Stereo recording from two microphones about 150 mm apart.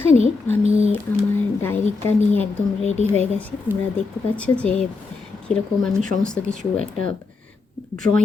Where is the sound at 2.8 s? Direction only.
50° left (ahead or behind).